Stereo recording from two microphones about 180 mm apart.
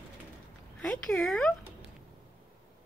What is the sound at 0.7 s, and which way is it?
Speech, 5° left (ahead or behind).